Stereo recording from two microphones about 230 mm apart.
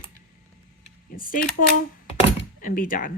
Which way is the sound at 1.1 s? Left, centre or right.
Left.